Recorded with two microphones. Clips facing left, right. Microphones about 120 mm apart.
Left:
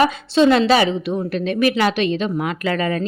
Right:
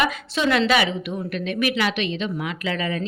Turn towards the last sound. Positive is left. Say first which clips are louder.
# left 5 dB
turn(degrees=45)  # may be behind; listen again after turning